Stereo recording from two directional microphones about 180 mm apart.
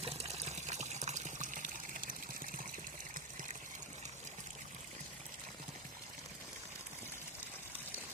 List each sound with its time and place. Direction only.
0.0 s water: 35° right (ahead or behind)